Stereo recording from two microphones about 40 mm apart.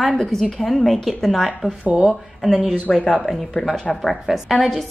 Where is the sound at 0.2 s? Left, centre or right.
Centre.